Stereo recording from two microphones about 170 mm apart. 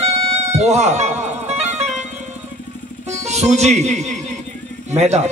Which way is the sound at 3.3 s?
40° right (ahead or behind).